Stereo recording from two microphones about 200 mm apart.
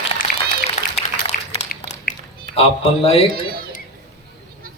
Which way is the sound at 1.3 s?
45° left (ahead or behind).